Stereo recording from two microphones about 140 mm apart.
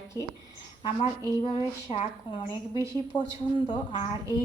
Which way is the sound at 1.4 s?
45° left (ahead or behind).